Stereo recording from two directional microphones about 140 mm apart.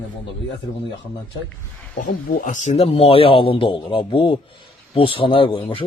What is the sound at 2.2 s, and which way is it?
A man's voice, 70° left (ahead or behind).